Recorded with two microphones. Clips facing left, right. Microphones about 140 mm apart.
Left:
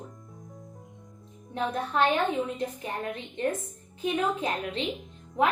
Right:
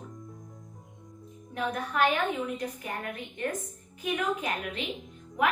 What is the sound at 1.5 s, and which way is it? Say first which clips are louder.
A woman's voice: left 2 dB; 25° left (ahead or behind).